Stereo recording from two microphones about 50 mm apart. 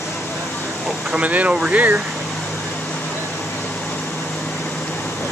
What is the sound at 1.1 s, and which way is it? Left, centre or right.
Speech, right.